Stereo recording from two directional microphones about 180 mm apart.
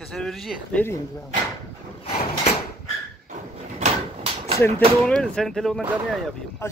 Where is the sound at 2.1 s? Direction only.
35° left (ahead or behind).